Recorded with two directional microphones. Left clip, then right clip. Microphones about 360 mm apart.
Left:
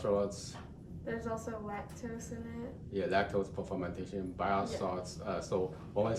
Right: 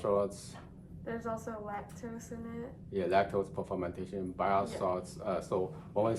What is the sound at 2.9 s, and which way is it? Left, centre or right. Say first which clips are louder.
Speech: right 2 dB; centre.